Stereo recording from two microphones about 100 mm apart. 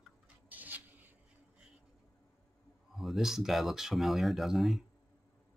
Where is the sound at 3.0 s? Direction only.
Centre (ahead or behind).